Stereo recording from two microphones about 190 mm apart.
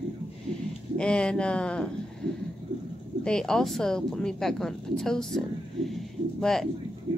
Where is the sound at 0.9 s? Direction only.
5° left (ahead or behind).